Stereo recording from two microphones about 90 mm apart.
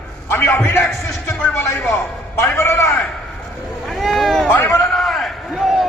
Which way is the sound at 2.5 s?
30° left (ahead or behind).